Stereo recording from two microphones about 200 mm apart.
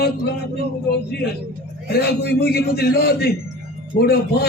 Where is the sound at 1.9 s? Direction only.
50° left (ahead or behind).